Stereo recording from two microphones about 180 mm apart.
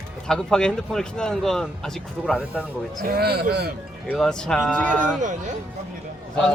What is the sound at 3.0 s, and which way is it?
Speech, 55° right (ahead or behind).